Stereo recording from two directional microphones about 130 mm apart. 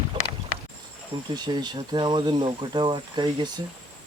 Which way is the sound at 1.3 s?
35° right (ahead or behind).